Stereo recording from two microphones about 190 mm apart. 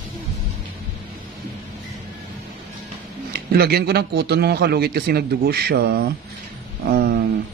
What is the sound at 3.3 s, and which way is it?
A man's voice, 55° right (ahead or behind).